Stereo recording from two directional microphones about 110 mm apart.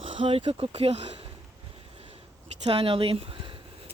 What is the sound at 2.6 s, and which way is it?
Speech, 60° right (ahead or behind).